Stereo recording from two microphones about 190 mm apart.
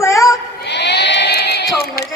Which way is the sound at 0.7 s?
65° left (ahead or behind).